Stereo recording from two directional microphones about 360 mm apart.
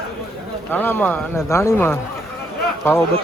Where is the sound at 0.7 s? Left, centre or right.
Centre.